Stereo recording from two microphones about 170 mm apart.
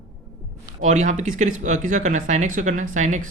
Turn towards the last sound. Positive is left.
turn(degrees=-45)  # may be behind; listen again after turning